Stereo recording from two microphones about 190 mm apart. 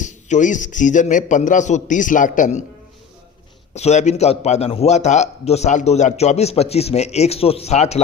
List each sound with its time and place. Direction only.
0.0 s a man's voice: 40° left (ahead or behind)
3.8 s a man's voice: 35° left (ahead or behind)